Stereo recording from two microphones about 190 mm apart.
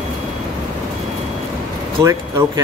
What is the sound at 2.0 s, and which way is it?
Speech, 15° right (ahead or behind).